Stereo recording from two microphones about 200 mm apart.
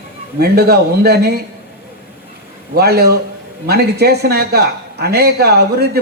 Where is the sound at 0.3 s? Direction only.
50° right (ahead or behind).